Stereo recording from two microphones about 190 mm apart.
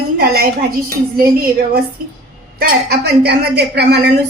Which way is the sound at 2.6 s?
60° right (ahead or behind).